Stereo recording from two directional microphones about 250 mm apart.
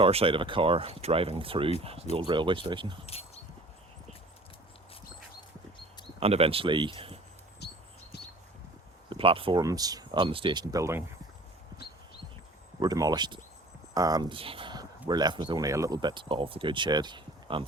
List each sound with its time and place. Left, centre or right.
0.0 s speech: right
6.1 s speech: right
7.6 s a sound: left
9.0 s speech: right
11.7 s a sound: centre
12.8 s speech: centre